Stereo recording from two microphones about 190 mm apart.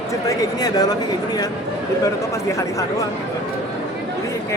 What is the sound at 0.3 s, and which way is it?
Speech, 20° left (ahead or behind).